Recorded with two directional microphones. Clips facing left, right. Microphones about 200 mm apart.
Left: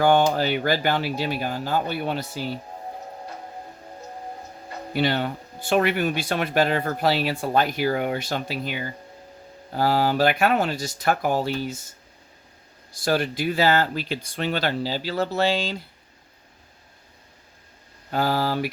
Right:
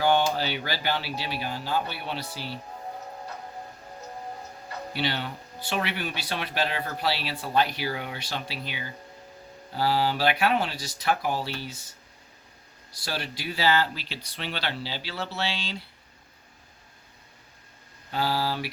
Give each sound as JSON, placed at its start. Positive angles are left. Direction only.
{"t": 0.0, "sound": "speech", "side_deg": 50}
{"t": 4.9, "sound": "speech", "side_deg": 50}
{"t": 13.1, "sound": "speech", "side_deg": 50}
{"t": 18.1, "sound": "speech", "side_deg": 50}